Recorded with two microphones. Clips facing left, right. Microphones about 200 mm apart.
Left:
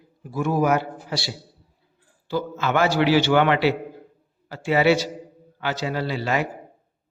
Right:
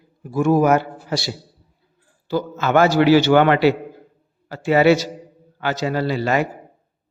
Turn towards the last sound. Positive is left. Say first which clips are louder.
# right 5 dB
turn(degrees=-45)  # may be behind; listen again after turning